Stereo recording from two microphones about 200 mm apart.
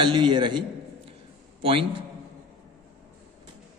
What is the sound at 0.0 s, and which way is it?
Speech, 25° right (ahead or behind).